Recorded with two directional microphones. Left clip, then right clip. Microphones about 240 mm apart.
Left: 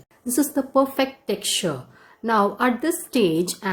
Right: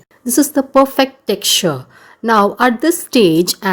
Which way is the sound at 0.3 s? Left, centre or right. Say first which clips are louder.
Right 9 dB; right.